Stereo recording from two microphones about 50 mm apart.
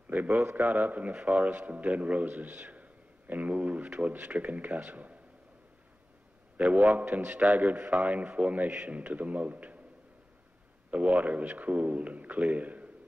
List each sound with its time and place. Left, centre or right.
0.1 s speech: right
1.1 s a man's voice: right
6.5 s a man's voice: right
7.0 s a man's voice: right
7.3 s a man's voice: right
10.9 s a man's voice: right